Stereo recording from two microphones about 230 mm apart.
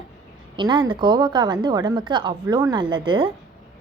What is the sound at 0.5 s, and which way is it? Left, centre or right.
A woman's voice, centre.